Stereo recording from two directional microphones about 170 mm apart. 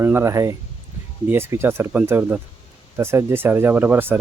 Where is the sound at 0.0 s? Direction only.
15° right (ahead or behind).